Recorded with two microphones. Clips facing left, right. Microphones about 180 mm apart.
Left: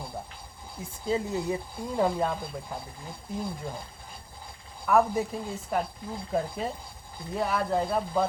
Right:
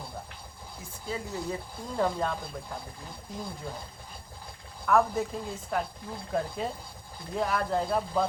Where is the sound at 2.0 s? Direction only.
10° left (ahead or behind).